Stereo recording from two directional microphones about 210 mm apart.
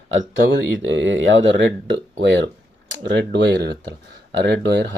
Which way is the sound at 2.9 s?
55° right (ahead or behind).